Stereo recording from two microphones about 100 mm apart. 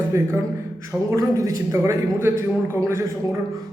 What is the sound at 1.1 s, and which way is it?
A man's voice, 35° right (ahead or behind).